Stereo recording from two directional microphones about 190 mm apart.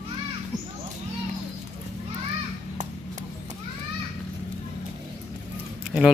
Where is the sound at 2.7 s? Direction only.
40° right (ahead or behind).